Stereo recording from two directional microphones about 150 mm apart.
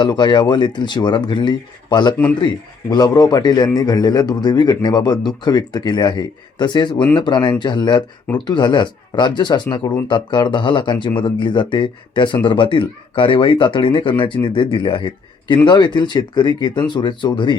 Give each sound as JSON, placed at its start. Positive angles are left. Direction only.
{"t": 0.0, "sound": "speech", "side_deg": 30}